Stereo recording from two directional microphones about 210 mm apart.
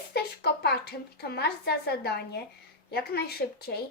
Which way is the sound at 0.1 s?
50° left (ahead or behind).